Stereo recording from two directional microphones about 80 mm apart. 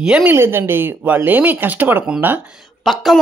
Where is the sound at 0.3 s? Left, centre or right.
Right.